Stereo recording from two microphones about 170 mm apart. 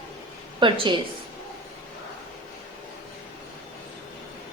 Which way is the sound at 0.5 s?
30° right (ahead or behind).